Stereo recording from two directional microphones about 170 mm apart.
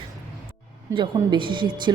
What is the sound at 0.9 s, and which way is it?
Speech, 30° right (ahead or behind).